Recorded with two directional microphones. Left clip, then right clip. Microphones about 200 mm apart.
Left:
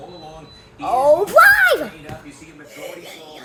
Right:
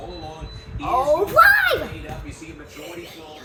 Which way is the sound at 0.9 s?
35° left (ahead or behind).